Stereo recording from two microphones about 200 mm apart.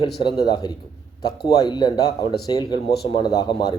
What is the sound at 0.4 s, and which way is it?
Speech, 20° left (ahead or behind).